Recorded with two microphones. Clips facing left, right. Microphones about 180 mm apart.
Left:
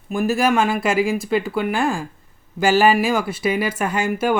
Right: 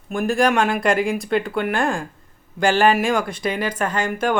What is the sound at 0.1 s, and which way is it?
Speech, 5° left (ahead or behind).